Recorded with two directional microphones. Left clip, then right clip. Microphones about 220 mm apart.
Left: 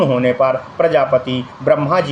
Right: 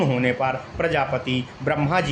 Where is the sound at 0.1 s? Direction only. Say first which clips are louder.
Left 8 dB; 20° right (ahead or behind).